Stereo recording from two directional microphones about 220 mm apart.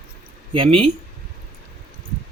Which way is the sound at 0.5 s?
25° right (ahead or behind).